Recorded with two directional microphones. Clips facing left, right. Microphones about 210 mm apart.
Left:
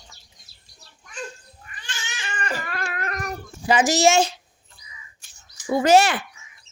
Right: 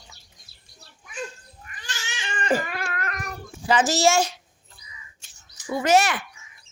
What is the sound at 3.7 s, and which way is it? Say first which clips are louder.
Speech: left 2 dB; 15° left (ahead or behind).